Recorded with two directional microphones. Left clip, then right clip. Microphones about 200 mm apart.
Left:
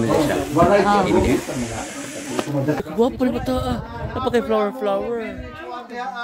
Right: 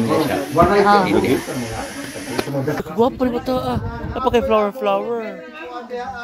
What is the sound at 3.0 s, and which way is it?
Speech, 10° left (ahead or behind).